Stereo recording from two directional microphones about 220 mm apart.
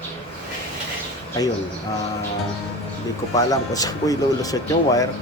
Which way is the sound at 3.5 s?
15° left (ahead or behind).